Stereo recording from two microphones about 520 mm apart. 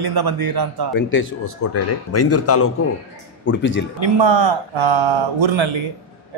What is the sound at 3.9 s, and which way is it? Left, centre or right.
Speech, right.